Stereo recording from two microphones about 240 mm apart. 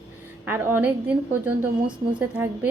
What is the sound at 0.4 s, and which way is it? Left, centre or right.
A woman's voice, centre.